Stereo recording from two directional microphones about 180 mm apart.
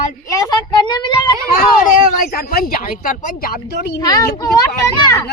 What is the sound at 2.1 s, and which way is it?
Speech, 55° left (ahead or behind).